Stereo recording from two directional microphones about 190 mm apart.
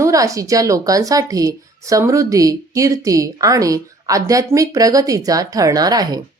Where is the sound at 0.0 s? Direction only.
15° right (ahead or behind).